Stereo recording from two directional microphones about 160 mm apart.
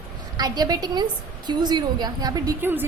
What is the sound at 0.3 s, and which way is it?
A woman's voice, 25° right (ahead or behind).